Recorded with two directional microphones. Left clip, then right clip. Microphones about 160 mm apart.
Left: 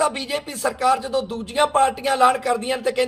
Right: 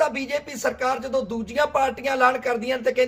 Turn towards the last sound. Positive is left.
turn(degrees=25)  # may be behind; listen again after turning